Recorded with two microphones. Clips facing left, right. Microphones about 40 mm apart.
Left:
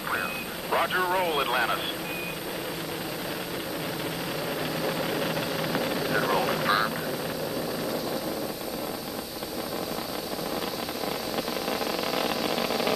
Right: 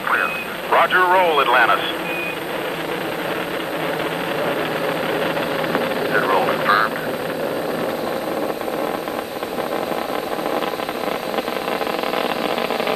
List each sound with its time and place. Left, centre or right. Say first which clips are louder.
0.1 s a sound: right 10 dB; right
4.8 s vehicle: right 6 dB; right
12.2 s vehicle: right 7 dB; right